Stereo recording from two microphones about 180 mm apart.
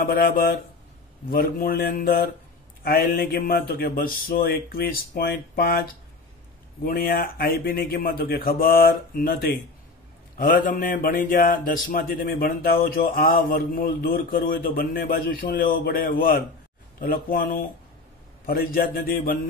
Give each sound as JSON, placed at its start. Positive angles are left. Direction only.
{"t": 0.0, "sound": "a man's voice", "side_deg": 50}